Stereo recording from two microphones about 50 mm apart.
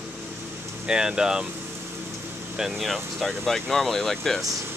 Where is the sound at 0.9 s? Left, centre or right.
Centre.